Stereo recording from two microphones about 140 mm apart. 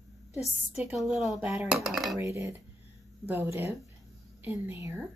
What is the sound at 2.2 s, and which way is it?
A woman's voice, 20° right (ahead or behind).